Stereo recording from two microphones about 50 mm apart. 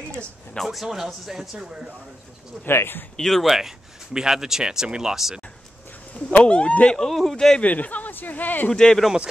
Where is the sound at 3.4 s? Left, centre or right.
Centre.